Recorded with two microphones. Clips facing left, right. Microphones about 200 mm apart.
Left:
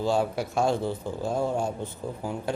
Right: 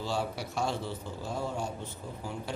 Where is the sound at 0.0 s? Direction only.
50° left (ahead or behind).